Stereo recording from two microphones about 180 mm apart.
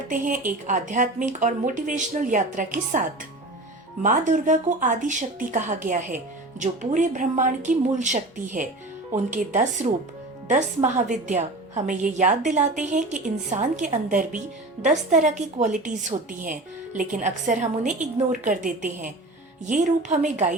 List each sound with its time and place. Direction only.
0.1 s a woman's voice: 50° right (ahead or behind)